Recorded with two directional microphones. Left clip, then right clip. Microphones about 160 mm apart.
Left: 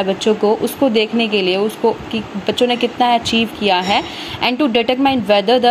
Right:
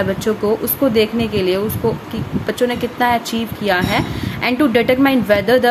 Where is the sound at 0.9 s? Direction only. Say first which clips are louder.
Left 1 dB; 25° right (ahead or behind).